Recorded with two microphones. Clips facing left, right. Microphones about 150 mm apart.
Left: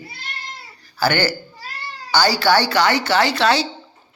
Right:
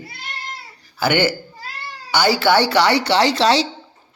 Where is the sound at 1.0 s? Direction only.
25° right (ahead or behind).